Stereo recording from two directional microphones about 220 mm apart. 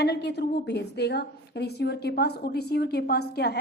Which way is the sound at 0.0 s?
50° left (ahead or behind).